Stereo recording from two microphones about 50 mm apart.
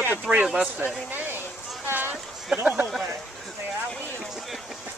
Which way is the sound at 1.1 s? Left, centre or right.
Right.